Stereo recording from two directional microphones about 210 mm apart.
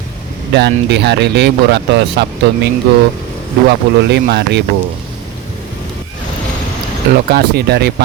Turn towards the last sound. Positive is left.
turn(degrees=-50)  # may be behind; listen again after turning